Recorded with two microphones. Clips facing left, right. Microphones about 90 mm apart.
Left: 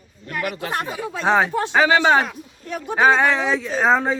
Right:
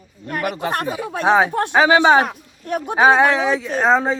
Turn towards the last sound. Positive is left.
turn(degrees=0)  # may be behind; listen again after turning